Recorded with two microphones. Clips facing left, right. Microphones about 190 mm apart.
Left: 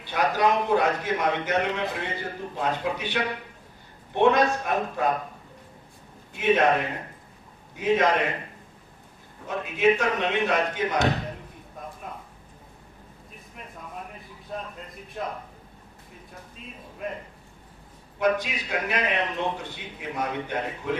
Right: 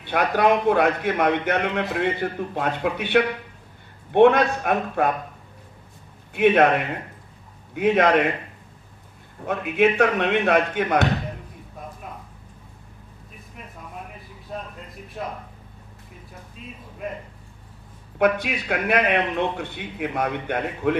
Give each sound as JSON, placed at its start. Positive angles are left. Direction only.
{"t": 0.0, "sound": "a man's voice", "side_deg": -60}
{"t": 6.3, "sound": "a man's voice", "side_deg": -60}
{"t": 9.5, "sound": "a man's voice", "side_deg": -60}
{"t": 14.5, "sound": "a sound", "side_deg": 0}
{"t": 15.2, "sound": "speech", "side_deg": 0}
{"t": 18.2, "sound": "a man's voice", "side_deg": -60}